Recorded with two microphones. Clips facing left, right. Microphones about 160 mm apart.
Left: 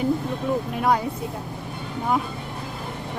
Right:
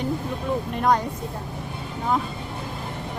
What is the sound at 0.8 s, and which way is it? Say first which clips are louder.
Speech: right 1 dB; 5° left (ahead or behind).